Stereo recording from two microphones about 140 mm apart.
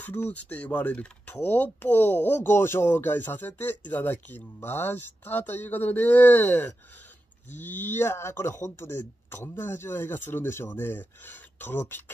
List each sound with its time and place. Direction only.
0.0 s speech: 10° left (ahead or behind)